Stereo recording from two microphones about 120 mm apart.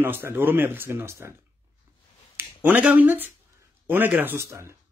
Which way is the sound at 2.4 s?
15° right (ahead or behind).